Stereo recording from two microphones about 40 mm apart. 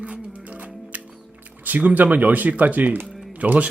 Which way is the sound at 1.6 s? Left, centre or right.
Right.